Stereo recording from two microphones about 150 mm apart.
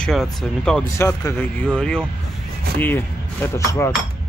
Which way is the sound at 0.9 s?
20° left (ahead or behind).